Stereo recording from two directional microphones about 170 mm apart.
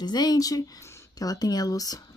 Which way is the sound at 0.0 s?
25° left (ahead or behind).